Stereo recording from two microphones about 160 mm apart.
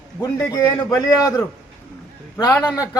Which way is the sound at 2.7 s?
20° left (ahead or behind).